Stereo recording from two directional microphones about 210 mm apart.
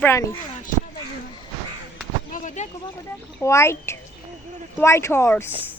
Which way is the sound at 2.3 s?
35° left (ahead or behind).